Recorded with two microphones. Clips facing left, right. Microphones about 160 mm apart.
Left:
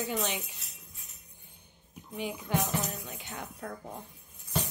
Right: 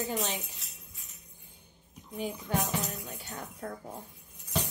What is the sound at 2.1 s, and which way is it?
Speech, 40° right (ahead or behind).